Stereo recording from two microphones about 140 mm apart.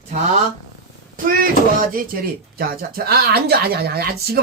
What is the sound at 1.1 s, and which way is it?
Speech, 90° right.